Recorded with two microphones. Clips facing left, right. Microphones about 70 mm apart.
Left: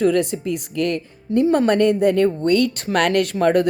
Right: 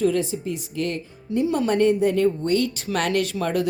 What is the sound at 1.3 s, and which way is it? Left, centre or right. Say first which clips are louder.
Speech: left 5 dB; left.